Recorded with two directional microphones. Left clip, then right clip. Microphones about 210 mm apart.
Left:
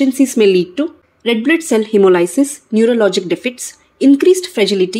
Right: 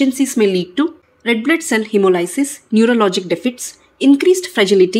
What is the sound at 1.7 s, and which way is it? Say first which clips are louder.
Speech: left 5 dB; 5° left (ahead or behind).